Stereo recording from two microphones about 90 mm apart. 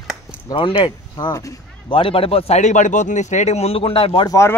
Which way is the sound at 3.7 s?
90° left.